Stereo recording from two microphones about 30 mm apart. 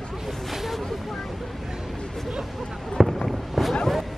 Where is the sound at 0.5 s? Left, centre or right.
Centre.